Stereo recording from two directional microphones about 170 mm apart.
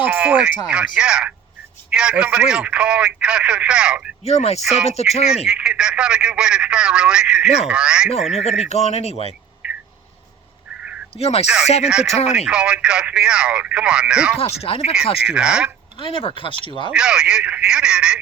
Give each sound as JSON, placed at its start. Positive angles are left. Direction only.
{"t": 0.0, "sound": "speech", "side_deg": -10}
{"t": 4.2, "sound": "a man's voice", "side_deg": 40}
{"t": 5.5, "sound": "speech", "side_deg": -5}
{"t": 8.4, "sound": "a man's voice", "side_deg": 40}
{"t": 9.6, "sound": "a sound", "side_deg": -10}
{"t": 11.1, "sound": "speech", "side_deg": 35}
{"t": 11.4, "sound": "speech", "side_deg": -5}
{"t": 14.3, "sound": "a man's voice", "side_deg": 35}
{"t": 15.3, "sound": "speech", "side_deg": -5}
{"t": 16.0, "sound": "a man's voice", "side_deg": 30}
{"t": 16.9, "sound": "speech", "side_deg": -5}